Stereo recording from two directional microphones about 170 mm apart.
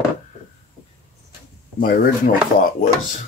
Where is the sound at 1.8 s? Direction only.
55° left (ahead or behind).